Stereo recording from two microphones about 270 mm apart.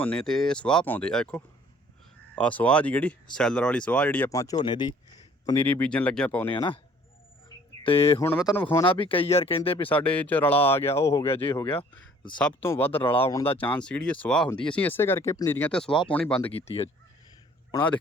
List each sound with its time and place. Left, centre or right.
0.0 s speech: centre
6.5 s speech: centre
7.9 s speech: left
8.4 s speech: centre
8.8 s speech: centre
9.9 s speech: centre
13.0 s speech: centre
13.6 s speech: centre
16.5 s speech: left
17.7 s a man's voice: centre